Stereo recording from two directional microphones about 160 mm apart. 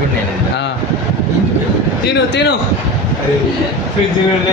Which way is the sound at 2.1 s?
90° left.